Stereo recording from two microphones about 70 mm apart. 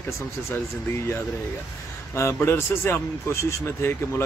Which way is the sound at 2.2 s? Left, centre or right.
Left.